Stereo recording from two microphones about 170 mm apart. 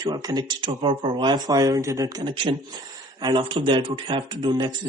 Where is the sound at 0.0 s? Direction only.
25° right (ahead or behind).